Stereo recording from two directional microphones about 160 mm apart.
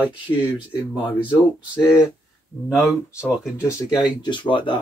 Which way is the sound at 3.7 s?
20° left (ahead or behind).